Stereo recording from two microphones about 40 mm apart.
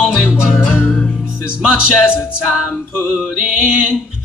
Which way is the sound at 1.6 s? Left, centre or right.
Right.